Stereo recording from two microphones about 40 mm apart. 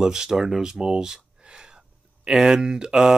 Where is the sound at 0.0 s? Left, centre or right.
Centre.